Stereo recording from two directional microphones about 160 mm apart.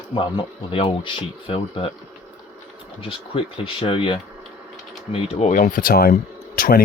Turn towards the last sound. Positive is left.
turn(degrees=65)  # may be behind; listen again after turning